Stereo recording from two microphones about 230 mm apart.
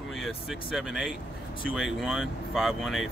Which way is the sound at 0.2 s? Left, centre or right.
Centre.